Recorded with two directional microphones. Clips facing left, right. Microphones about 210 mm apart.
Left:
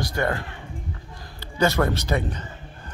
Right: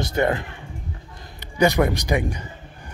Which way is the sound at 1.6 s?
15° right (ahead or behind).